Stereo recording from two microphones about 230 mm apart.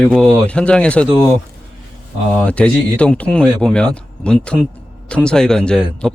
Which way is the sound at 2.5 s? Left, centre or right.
Centre.